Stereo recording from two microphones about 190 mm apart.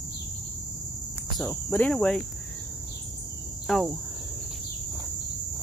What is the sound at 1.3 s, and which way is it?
Cricket, centre (ahead or behind).